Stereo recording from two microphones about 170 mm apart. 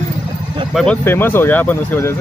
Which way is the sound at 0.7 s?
10° left (ahead or behind).